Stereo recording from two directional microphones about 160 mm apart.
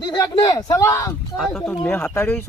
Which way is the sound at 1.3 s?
Centre (ahead or behind).